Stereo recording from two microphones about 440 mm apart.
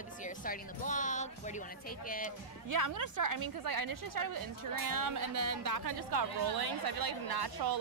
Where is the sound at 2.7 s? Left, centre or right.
Right.